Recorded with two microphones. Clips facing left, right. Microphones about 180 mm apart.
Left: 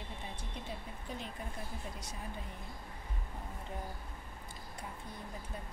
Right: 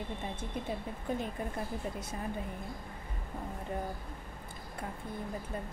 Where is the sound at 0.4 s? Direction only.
50° right (ahead or behind).